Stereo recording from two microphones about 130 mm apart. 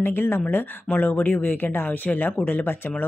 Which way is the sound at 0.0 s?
15° left (ahead or behind).